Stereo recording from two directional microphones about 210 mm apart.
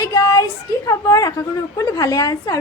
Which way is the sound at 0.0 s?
20° left (ahead or behind).